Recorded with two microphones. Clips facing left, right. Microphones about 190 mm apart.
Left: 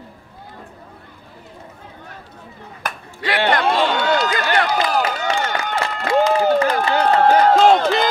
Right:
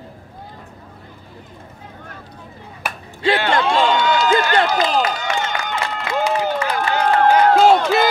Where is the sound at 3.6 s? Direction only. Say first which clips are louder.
Right 1 dB; 55° left (ahead or behind).